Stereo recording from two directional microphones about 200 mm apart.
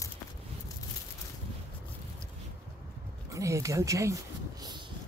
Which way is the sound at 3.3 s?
15° right (ahead or behind).